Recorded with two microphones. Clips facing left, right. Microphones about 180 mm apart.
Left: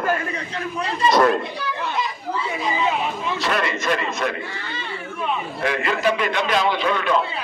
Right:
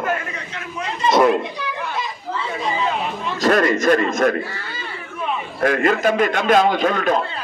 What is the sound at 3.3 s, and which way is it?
A man's voice, 45° right (ahead or behind).